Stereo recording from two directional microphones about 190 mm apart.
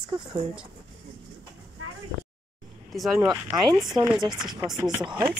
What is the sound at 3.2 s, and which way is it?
Speech, 15° right (ahead or behind).